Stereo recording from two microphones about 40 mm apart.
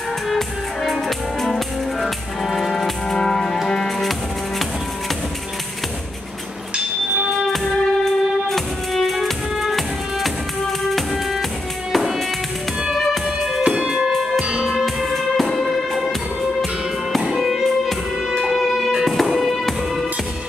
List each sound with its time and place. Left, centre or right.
0.3 s music: centre
2.7 s music: centre
7.5 s music: centre
13.6 s music: centre
15.0 s music: centre
17.2 s music: centre
18.5 s music: centre